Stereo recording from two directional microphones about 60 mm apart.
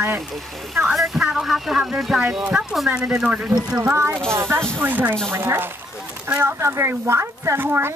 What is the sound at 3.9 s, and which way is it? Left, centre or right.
Speech, right.